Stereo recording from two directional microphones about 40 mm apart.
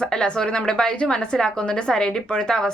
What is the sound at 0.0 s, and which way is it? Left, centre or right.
A woman's voice, left.